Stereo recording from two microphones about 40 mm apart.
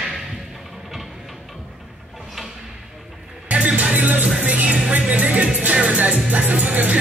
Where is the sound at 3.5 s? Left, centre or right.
Right.